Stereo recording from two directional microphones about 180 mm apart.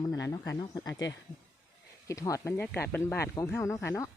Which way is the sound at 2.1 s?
20° left (ahead or behind).